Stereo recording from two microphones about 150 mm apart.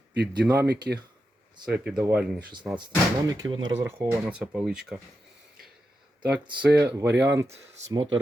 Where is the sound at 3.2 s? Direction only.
25° right (ahead or behind).